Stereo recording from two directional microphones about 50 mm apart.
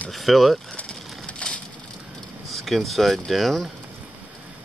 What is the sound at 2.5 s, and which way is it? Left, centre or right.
Speech, centre.